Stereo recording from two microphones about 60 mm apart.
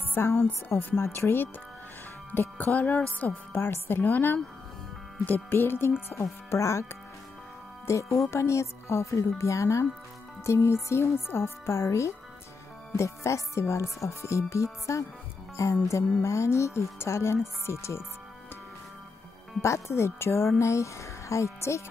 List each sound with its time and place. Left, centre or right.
0.1 s a woman's voice: left
2.5 s a woman's voice: left
6.5 s speech: left
19.6 s speech: left